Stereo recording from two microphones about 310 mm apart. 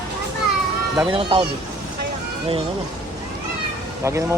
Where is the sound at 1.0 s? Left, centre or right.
Centre.